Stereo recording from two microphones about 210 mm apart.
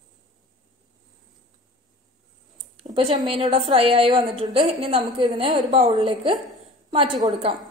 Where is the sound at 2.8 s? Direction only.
25° right (ahead or behind).